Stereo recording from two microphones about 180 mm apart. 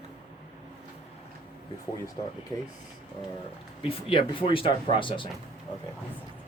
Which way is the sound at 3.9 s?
30° left (ahead or behind).